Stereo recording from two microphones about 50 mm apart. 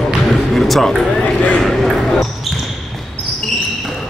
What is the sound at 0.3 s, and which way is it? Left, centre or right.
Basketball bounce, centre.